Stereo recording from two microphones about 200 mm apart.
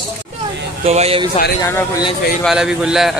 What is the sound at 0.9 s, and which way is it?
Speech, 30° right (ahead or behind).